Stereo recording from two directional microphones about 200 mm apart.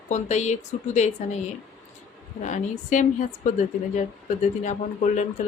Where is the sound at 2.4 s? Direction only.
35° left (ahead or behind).